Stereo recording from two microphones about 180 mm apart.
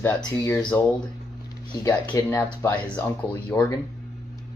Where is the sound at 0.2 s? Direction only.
15° left (ahead or behind).